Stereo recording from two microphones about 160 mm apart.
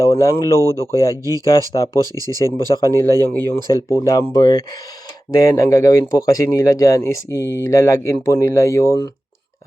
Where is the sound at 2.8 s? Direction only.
15° left (ahead or behind).